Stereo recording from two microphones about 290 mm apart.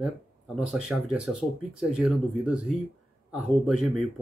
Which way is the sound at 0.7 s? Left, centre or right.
Centre.